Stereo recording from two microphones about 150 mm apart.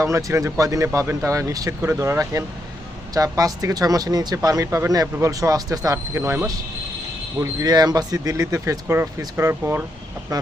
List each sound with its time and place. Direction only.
0.0 s speech: 20° right (ahead or behind)
10.3 s speech: 25° right (ahead or behind)